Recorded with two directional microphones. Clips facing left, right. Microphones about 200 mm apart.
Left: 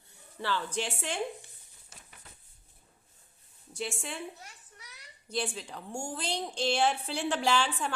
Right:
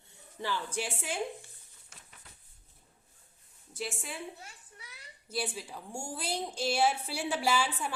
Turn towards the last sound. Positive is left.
turn(degrees=-5)  # may be behind; listen again after turning